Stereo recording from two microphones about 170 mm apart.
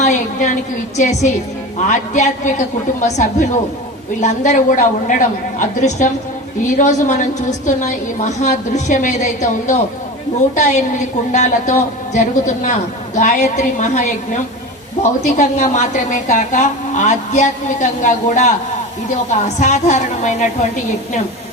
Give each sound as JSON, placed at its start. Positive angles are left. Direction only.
{"t": 0.0, "sound": "a woman's voice", "side_deg": 45}
{"t": 15.4, "sound": "a woman's voice", "side_deg": 45}